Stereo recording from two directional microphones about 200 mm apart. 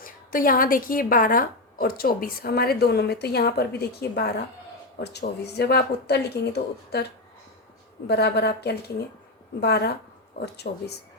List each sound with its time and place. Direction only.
0.0 s a woman's voice: 45° left (ahead or behind)